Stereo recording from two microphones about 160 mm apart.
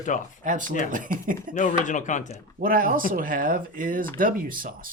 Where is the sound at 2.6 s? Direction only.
65° right (ahead or behind).